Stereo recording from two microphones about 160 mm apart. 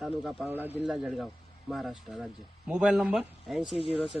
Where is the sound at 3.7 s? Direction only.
35° left (ahead or behind).